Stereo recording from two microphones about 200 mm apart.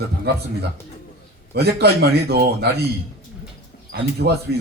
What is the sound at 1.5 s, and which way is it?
Speech, 55° right (ahead or behind).